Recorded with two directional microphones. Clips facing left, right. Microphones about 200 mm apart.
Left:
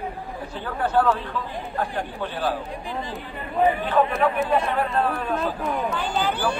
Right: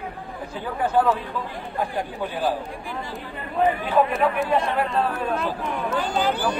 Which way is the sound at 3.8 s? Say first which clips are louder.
Even; 5° right (ahead or behind).